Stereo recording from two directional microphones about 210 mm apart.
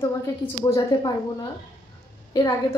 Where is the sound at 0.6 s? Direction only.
20° left (ahead or behind).